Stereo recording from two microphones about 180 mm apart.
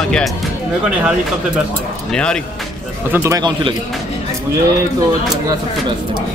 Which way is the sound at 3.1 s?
15° right (ahead or behind).